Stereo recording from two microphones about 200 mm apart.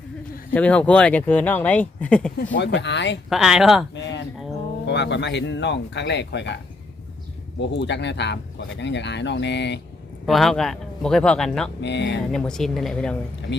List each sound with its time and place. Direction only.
0.5 s speech: 5° left (ahead or behind)
2.5 s speech: 60° left (ahead or behind)
3.2 s speech: centre (ahead or behind)
3.9 s speech: 65° left (ahead or behind)
7.6 s speech: 60° left (ahead or behind)
10.2 s speech: centre (ahead or behind)
11.8 s speech: 60° left (ahead or behind)
12.3 s speech: 5° left (ahead or behind)